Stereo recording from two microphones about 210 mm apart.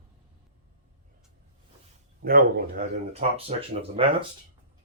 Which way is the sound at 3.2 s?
35° right (ahead or behind).